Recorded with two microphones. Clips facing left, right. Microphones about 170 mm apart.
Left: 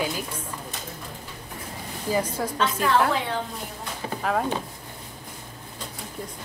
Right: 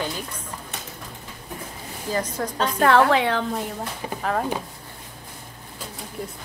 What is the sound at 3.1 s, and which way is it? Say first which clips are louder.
Speech: right 6 dB; 75° right (ahead or behind).